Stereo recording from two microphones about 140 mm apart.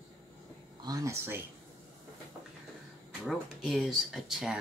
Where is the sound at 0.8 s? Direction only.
25° right (ahead or behind).